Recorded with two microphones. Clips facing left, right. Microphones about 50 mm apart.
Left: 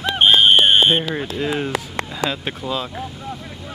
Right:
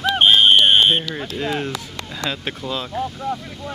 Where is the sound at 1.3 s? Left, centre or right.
Centre.